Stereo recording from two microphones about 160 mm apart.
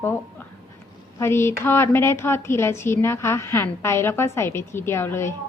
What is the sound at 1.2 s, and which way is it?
A woman's voice, 15° left (ahead or behind).